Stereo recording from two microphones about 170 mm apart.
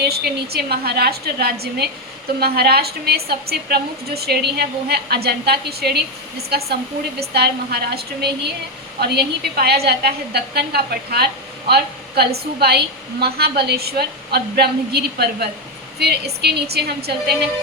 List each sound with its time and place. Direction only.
0.0 s a woman's voice: 70° right (ahead or behind)